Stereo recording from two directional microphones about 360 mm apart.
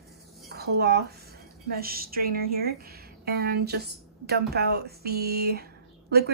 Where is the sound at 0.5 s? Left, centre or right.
Right.